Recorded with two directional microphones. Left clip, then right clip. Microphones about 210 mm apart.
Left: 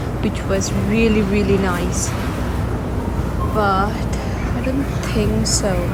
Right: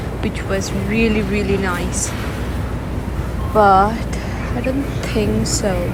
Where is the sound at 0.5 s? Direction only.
15° left (ahead or behind).